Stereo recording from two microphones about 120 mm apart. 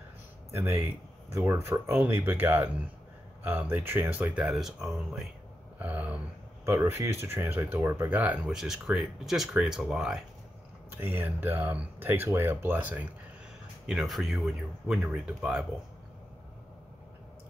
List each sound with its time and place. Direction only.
0.5 s speech: 20° right (ahead or behind); by 5.3 s 5° right (ahead or behind)
5.8 s a sound: 10° right (ahead or behind)
6.6 s speech: 20° right (ahead or behind); by 10.2 s 5° right (ahead or behind)
10.9 s speech: 15° right (ahead or behind)
13.8 s speech: centre (ahead or behind)